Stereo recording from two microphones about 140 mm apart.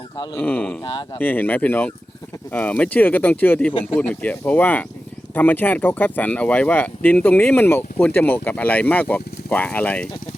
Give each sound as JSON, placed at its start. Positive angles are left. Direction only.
{"t": 0.3, "sound": "speech", "side_deg": 10}
{"t": 0.9, "sound": "speech", "side_deg": 35}
{"t": 1.2, "sound": "speech", "side_deg": 15}